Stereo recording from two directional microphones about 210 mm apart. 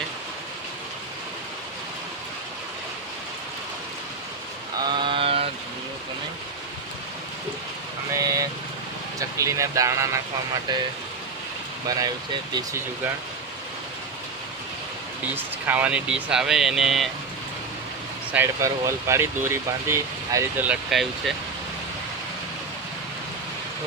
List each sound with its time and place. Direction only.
4.9 s a sound: 25° right (ahead or behind)
8.1 s vehicle: 15° right (ahead or behind)
9.1 s speech: 15° right (ahead or behind)
11.9 s speech: 20° right (ahead or behind)
15.4 s speech: 10° right (ahead or behind)
18.3 s speech: 15° right (ahead or behind)